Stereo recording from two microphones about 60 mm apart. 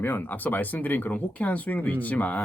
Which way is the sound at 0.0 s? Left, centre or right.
Left.